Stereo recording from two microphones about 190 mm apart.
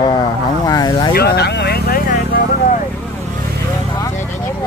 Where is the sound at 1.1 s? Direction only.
55° left (ahead or behind).